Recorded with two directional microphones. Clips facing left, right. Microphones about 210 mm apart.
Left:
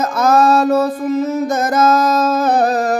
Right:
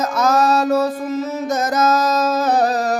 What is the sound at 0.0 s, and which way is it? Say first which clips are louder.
Music: left 3 dB; 55° left (ahead or behind).